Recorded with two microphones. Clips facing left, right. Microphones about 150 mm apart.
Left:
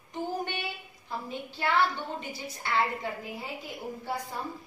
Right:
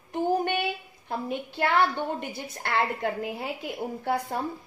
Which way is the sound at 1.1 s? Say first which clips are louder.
Right 5 dB; 60° right (ahead or behind).